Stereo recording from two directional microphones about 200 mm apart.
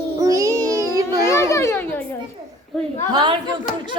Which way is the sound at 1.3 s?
15° left (ahead or behind).